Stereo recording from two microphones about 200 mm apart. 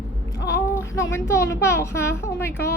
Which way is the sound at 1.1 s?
15° left (ahead or behind).